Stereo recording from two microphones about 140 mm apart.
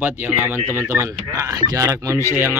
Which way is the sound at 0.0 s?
10° right (ahead or behind).